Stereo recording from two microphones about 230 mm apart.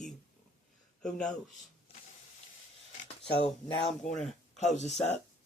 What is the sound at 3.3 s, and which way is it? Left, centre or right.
Speech, left.